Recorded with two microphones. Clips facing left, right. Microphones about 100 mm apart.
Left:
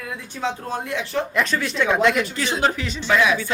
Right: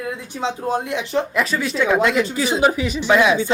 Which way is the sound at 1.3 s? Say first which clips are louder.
Right 2 dB; 5° right (ahead or behind).